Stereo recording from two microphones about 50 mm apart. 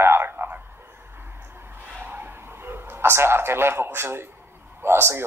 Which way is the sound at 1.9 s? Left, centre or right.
Right.